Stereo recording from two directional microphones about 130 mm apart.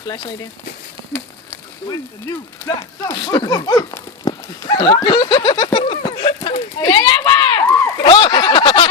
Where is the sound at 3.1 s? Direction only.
40° left (ahead or behind).